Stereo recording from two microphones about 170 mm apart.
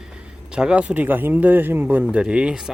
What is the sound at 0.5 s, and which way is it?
Speech, 5° right (ahead or behind).